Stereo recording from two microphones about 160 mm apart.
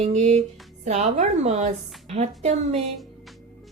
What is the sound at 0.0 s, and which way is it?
A woman's voice, 45° right (ahead or behind).